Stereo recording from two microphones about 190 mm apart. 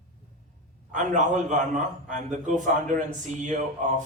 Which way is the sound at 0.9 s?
40° right (ahead or behind).